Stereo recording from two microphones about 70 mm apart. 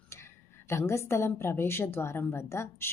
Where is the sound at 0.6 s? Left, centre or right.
Left.